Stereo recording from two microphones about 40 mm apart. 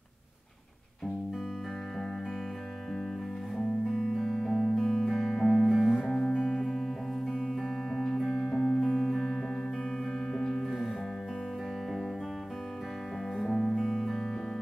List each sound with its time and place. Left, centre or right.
4.4 s music: centre
5.7 s music: centre
6.0 s music: centre
6.6 s music: centre
7.9 s music: centre
9.0 s music: centre
10.3 s music: centre
10.6 s music: centre
13.4 s music: centre